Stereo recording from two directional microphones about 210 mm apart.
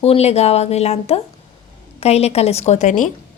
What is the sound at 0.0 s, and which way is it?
Speech, 30° left (ahead or behind).